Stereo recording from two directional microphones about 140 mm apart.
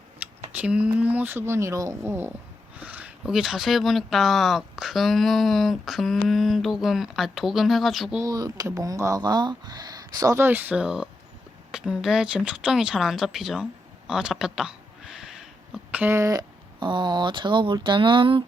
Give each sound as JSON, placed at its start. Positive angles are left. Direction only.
{"t": 0.5, "sound": "speech", "side_deg": -10}
{"t": 8.2, "sound": "speech", "side_deg": -30}